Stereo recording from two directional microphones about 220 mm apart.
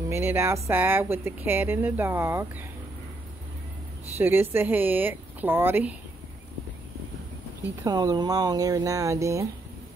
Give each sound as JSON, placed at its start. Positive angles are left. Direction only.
{"t": 0.1, "sound": "speech", "side_deg": -10}
{"t": 4.2, "sound": "speech", "side_deg": -10}
{"t": 7.8, "sound": "speech", "side_deg": -15}